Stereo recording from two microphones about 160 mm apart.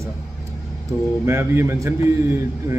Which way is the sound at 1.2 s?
15° right (ahead or behind).